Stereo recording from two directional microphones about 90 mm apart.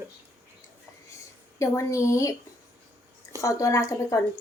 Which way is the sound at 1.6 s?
35° left (ahead or behind).